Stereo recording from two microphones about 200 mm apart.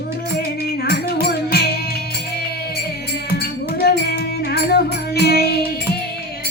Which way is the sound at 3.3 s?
50° left (ahead or behind).